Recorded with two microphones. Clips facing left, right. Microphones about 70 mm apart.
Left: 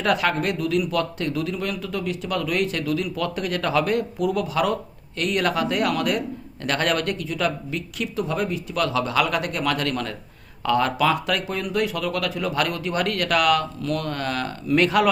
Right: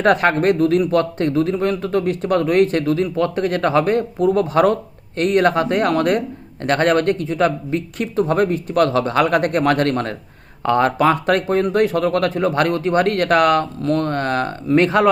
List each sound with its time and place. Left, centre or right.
0.0 s a man's voice: right